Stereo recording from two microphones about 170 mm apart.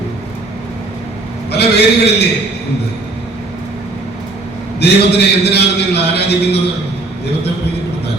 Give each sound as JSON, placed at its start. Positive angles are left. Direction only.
{"t": 1.5, "sound": "a man's voice", "side_deg": 75}
{"t": 4.8, "sound": "a man's voice", "side_deg": 75}